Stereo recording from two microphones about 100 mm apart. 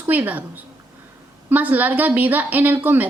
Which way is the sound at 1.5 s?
15° right (ahead or behind).